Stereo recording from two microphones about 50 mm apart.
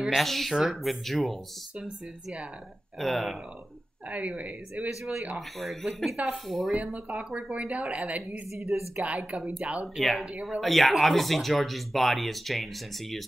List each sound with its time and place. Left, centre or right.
0.0 s speech: centre
3.0 s speech: centre
4.1 s a woman's voice: right
5.6 s speech: centre
6.7 s a woman's voice: right
8.5 s a woman's voice: centre
8.9 s a woman's voice: right
9.9 s speech: centre